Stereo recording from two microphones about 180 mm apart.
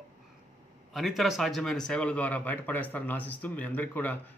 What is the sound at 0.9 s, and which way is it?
Speech, centre (ahead or behind).